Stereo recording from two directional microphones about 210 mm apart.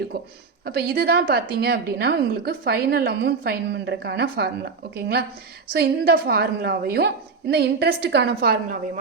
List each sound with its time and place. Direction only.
0.1 s a woman's voice: 50° right (ahead or behind)